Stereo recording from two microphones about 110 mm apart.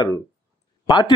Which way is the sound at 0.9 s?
40° left (ahead or behind).